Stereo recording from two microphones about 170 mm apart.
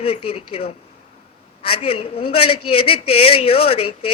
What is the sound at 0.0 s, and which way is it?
A man's voice, 35° left (ahead or behind).